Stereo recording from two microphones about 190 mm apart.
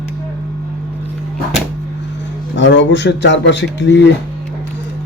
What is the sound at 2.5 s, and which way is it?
Speech, 70° left (ahead or behind).